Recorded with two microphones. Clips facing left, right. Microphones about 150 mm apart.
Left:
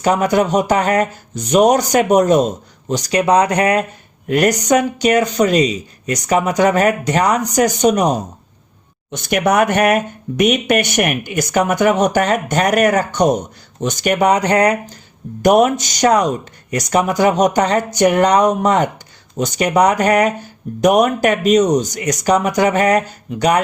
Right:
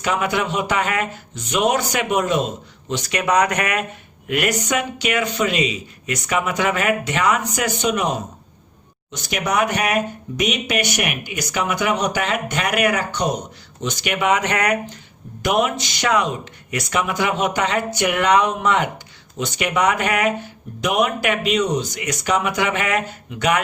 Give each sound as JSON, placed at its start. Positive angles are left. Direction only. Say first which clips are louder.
{"t": 0.0, "sound": "speech", "louder": "left 7 dB", "side_deg": 40}
{"t": 9.1, "sound": "speech", "louder": "left 7 dB", "side_deg": 55}
{"t": 15.4, "sound": "speech", "louder": "left 8 dB", "side_deg": 45}